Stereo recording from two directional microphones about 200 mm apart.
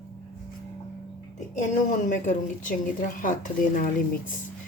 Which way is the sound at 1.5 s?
40° left (ahead or behind).